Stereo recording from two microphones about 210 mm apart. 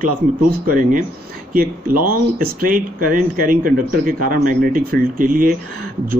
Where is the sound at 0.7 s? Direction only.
40° right (ahead or behind).